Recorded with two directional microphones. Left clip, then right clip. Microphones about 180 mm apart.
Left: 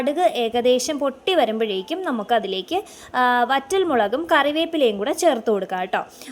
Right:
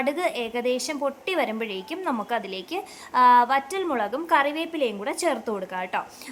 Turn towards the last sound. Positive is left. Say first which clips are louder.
# left 7 dB
turn(degrees=25)  # may be behind; listen again after turning